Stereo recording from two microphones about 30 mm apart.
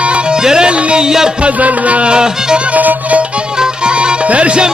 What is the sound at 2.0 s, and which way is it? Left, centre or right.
Music, right.